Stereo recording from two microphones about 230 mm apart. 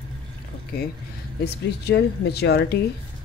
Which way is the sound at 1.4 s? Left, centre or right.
Left.